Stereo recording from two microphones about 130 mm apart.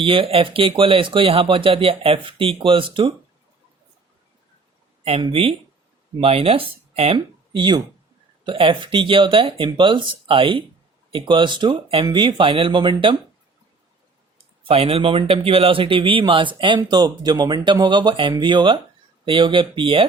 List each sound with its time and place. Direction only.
0.0 s speech: 45° right (ahead or behind)
5.2 s speech: 45° right (ahead or behind)
7.5 s speech: 35° right (ahead or behind)
14.3 s speech: 45° right (ahead or behind)